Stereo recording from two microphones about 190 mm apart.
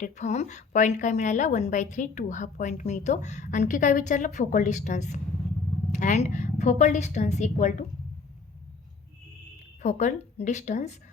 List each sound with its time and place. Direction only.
0.0 s a woman's voice: 40° left (ahead or behind)
9.8 s a woman's voice: 40° left (ahead or behind)